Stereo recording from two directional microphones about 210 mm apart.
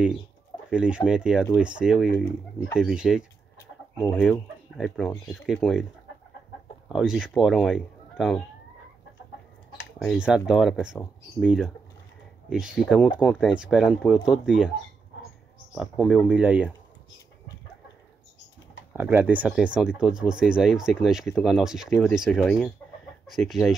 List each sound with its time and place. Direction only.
0.7 s speech: 5° right (ahead or behind)
3.5 s chicken: 10° left (ahead or behind)
4.2 s speech: centre (ahead or behind)
6.9 s speech: centre (ahead or behind)
9.9 s speech: centre (ahead or behind)
15.7 s speech: 5° right (ahead or behind)
18.9 s speech: 10° right (ahead or behind)